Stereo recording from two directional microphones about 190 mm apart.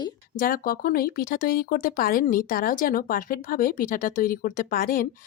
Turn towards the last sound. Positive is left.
turn(degrees=45)  # may be behind; listen again after turning